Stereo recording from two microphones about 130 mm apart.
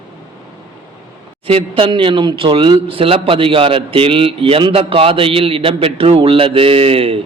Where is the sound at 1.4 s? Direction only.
45° right (ahead or behind).